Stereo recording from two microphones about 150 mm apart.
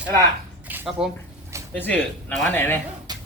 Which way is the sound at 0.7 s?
10° right (ahead or behind).